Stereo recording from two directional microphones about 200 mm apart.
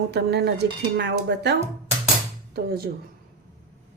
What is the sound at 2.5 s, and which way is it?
Speech, 50° right (ahead or behind).